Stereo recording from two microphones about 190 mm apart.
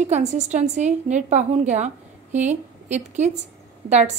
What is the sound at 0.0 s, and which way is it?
A woman's voice, 35° right (ahead or behind).